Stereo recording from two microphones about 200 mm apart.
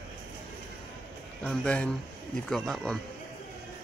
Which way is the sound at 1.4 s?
5° left (ahead or behind).